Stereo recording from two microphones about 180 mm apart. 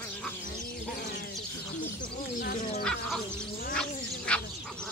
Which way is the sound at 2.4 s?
55° left (ahead or behind).